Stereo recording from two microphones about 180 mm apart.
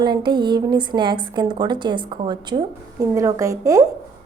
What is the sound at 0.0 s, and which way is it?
A woman's voice, 25° right (ahead or behind).